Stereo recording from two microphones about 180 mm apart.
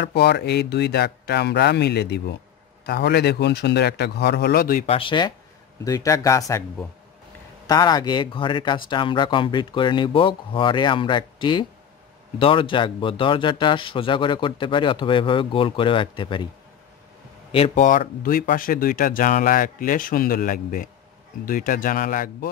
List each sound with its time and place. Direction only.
0.0 s a man's voice: 70° left (ahead or behind); by 4.8 s 55° left (ahead or behind)
4.8 s speech: 30° left (ahead or behind)
17.5 s speech: 30° left (ahead or behind)
17.8 s speech: 50° left (ahead or behind)